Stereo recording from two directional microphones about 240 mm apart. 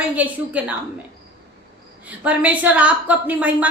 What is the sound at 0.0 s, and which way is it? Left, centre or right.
Speech, centre.